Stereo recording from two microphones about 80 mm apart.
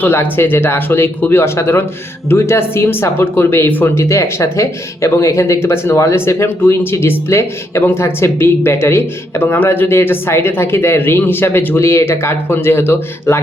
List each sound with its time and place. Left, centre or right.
0.0 s speech: left